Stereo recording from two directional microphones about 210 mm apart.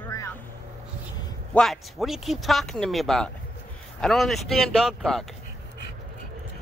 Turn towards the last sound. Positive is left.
turn(degrees=0)  # may be behind; listen again after turning